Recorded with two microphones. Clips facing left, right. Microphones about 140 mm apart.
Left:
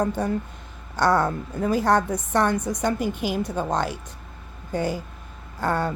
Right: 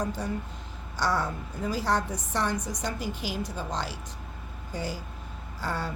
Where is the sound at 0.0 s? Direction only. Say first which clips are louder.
Left 7 dB; 60° left (ahead or behind).